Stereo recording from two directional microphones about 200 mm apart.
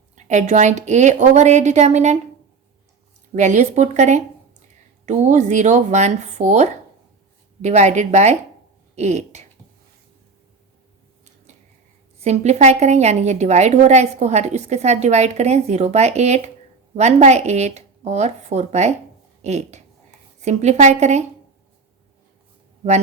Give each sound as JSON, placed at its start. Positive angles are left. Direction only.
{"t": 0.2, "sound": "a woman's voice", "side_deg": -35}
{"t": 3.3, "sound": "a woman's voice", "side_deg": -35}
{"t": 12.2, "sound": "a woman's voice", "side_deg": -35}